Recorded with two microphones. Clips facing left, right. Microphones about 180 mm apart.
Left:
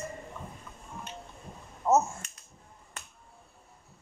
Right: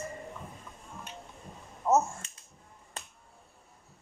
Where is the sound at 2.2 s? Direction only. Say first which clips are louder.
Left 1 dB; 25° right (ahead or behind).